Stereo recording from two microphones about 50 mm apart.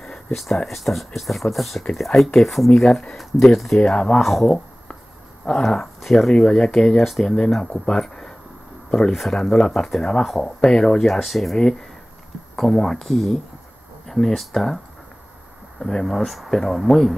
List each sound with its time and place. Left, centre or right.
0.7 s speech: centre
3.8 s speech: centre
4.2 s speech: centre
5.4 s speech: left
5.9 s speech: centre
7.0 s speech: centre
10.2 s speech: centre
15.8 s speech: centre